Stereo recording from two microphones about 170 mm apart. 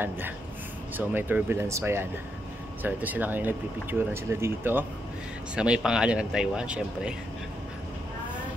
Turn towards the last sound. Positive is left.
turn(degrees=-5)  # may be behind; listen again after turning